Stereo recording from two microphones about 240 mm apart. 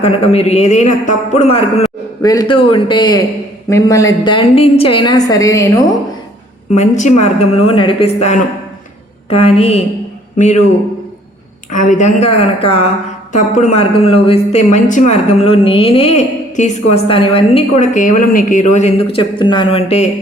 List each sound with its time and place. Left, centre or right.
0.0 s speech: left
2.2 s a woman's voice: centre
6.7 s speech: left
11.7 s speech: left